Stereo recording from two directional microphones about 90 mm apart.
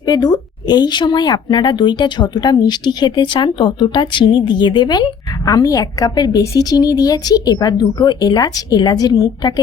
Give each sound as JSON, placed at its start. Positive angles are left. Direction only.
{"t": 0.0, "sound": "a woman's voice", "side_deg": 50}